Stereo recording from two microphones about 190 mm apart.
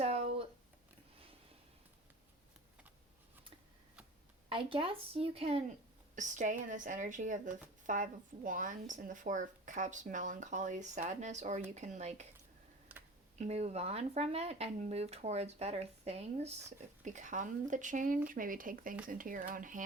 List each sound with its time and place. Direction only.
0.0 s a sound: 30° right (ahead or behind)
4.4 s speech: 30° right (ahead or behind)
12.9 s computer keyboard: 10° right (ahead or behind)
13.4 s speech: 35° right (ahead or behind)